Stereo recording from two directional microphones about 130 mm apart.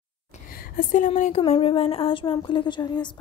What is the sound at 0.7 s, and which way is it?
Speech, 80° left.